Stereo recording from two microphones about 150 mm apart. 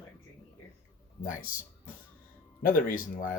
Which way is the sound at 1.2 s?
65° left (ahead or behind).